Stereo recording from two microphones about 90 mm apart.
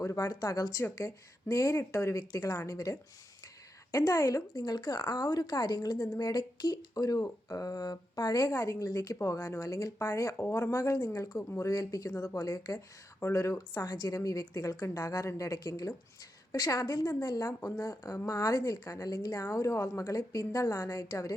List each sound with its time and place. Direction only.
0.0 s a woman's voice: 40° left (ahead or behind)
13.1 s speech: 30° left (ahead or behind)
13.7 s a woman's voice: 45° left (ahead or behind)